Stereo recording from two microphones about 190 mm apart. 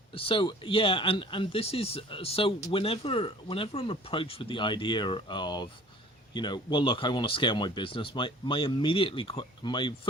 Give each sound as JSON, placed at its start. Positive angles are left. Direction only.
{"t": 0.1, "sound": "speech", "side_deg": 30}